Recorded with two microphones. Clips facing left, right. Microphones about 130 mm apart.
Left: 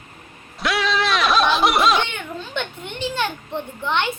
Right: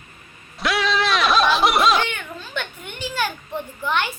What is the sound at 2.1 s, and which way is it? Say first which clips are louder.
A child's voice: left 2 dB; 25° left (ahead or behind).